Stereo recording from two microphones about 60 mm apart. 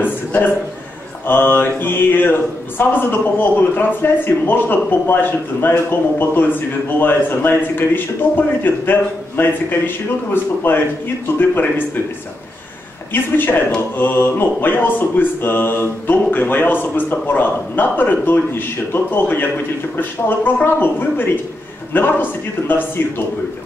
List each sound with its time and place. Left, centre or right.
0.0 s a sound: left
1.2 s speech: left
13.1 s speech: left